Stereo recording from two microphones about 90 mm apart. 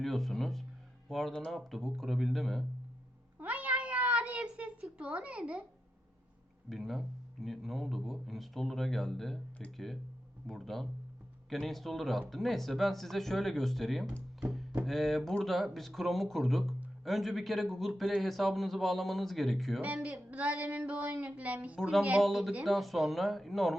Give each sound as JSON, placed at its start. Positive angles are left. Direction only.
{"t": 0.0, "sound": "speech", "side_deg": 0}
{"t": 3.3, "sound": "cat", "side_deg": -15}
{"t": 4.5, "sound": "a sound", "side_deg": -10}
{"t": 6.7, "sound": "speech", "side_deg": 0}
{"t": 20.3, "sound": "female singing", "side_deg": -15}
{"t": 20.7, "sound": "a sound", "side_deg": -15}
{"t": 21.8, "sound": "speech", "side_deg": -5}